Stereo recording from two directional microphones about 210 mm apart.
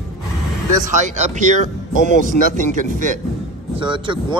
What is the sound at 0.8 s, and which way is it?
Speech, 35° right (ahead or behind).